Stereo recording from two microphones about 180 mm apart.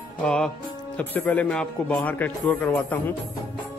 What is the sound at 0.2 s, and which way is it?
Music, 5° left (ahead or behind).